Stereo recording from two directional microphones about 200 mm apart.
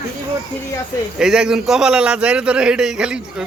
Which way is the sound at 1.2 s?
5° right (ahead or behind).